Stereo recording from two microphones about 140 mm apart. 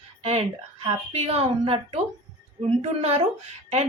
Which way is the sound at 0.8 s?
45° right (ahead or behind).